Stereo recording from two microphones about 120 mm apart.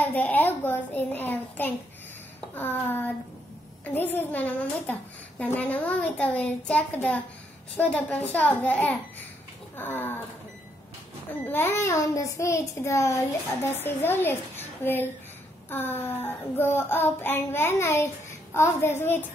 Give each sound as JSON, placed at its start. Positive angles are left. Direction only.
{"t": 0.0, "sound": "a woman's voice", "side_deg": 15}
{"t": 11.4, "sound": "child singing", "side_deg": 20}
{"t": 13.8, "sound": "a child's voice", "side_deg": 20}
{"t": 15.7, "sound": "child singing", "side_deg": 15}